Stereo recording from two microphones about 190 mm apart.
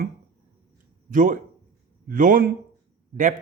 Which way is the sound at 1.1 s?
45° right (ahead or behind).